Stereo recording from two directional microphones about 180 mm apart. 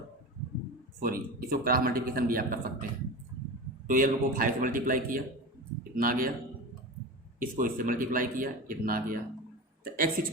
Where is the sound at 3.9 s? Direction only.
50° right (ahead or behind).